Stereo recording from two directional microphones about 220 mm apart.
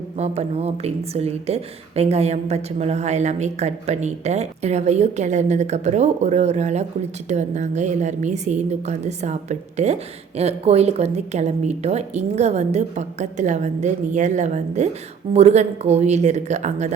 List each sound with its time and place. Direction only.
0.2 s a woman's voice: 30° right (ahead or behind)